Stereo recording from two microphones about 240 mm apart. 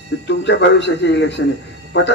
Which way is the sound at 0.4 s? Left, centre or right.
Left.